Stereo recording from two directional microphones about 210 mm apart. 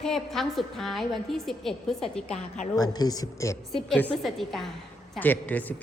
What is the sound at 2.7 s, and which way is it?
Speech, 20° left (ahead or behind).